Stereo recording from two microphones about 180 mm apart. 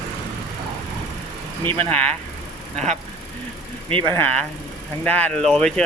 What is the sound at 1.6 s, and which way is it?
Speech, 10° left (ahead or behind).